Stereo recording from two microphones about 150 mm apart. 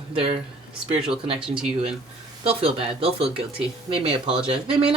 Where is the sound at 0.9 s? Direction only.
5° right (ahead or behind).